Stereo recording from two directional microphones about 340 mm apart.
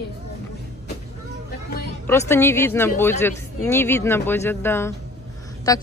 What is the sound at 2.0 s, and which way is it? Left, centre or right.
A woman's voice, centre.